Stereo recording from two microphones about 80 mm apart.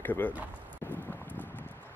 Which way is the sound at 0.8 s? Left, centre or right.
Left.